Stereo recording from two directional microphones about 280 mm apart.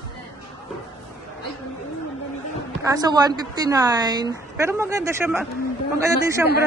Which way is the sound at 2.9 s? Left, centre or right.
Centre.